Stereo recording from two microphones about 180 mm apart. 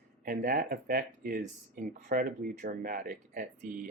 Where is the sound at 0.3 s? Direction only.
55° right (ahead or behind).